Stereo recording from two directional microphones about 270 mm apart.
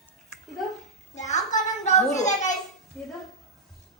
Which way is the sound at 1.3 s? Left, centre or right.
Left.